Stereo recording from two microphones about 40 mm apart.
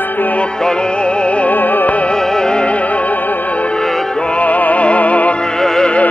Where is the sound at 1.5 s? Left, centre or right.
Left.